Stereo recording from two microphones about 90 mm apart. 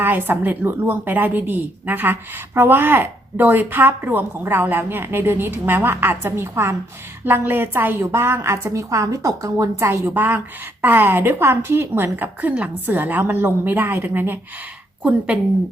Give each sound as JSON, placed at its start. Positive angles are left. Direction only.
{"t": 0.0, "sound": "a woman's voice", "side_deg": -20}
{"t": 10.2, "sound": "a woman's voice", "side_deg": -20}